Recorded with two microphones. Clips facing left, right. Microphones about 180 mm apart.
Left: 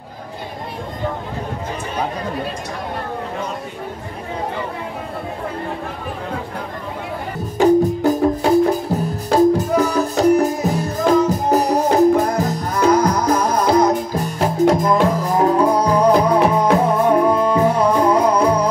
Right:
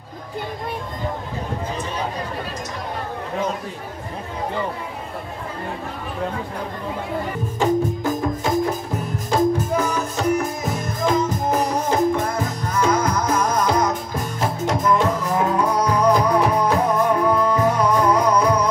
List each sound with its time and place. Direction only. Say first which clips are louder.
7.6 s music: left 7 dB; 35° left (ahead or behind)